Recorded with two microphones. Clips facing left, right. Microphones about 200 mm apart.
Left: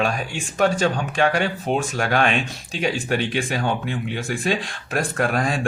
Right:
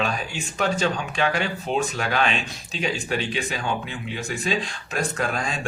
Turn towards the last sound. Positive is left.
turn(degrees=55)  # may be behind; listen again after turning